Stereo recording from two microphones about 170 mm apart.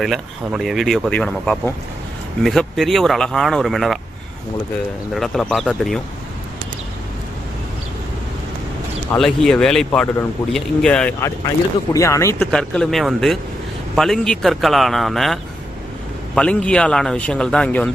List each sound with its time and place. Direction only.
0.0 s a man's voice: centre (ahead or behind)
5.1 s a man's voice: centre (ahead or behind)
9.1 s a man's voice: 5° left (ahead or behind)
11.9 s speech: 20° left (ahead or behind)
12.5 s a man's voice: 5° left (ahead or behind)